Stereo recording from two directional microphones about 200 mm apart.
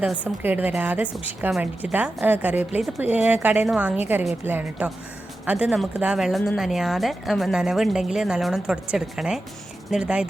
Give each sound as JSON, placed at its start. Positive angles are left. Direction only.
{"t": 0.0, "sound": "a woman's voice", "side_deg": -5}